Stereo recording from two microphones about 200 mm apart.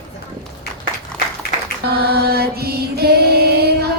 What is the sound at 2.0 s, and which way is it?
Music, 50° right (ahead or behind).